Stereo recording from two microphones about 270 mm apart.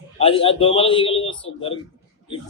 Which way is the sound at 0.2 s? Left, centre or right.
Centre.